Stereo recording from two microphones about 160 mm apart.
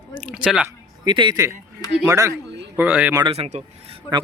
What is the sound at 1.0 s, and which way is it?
Speech, 30° right (ahead or behind).